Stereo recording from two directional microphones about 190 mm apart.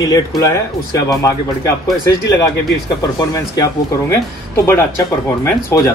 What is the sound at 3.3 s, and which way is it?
Speech, 15° left (ahead or behind).